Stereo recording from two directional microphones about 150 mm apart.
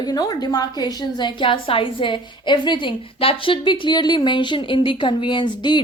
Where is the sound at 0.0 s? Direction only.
25° left (ahead or behind).